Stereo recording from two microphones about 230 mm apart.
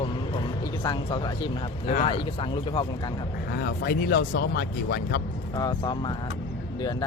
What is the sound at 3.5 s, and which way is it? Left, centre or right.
Speech, left.